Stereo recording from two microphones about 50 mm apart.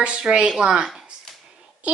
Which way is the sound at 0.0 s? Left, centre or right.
Centre.